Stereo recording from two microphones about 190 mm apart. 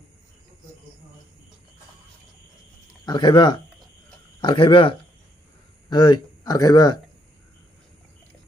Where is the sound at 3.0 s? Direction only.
25° left (ahead or behind).